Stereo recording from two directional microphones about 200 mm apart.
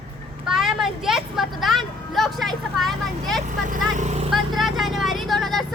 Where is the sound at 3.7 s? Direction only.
35° right (ahead or behind).